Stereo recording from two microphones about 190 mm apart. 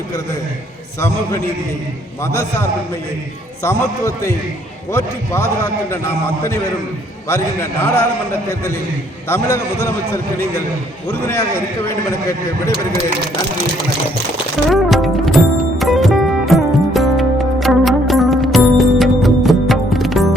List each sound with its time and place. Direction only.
0.9 s a man's voice: 15° left (ahead or behind)
3.6 s a man's voice: 15° left (ahead or behind)
7.3 s a man's voice: 15° left (ahead or behind)
14.7 s music: centre (ahead or behind)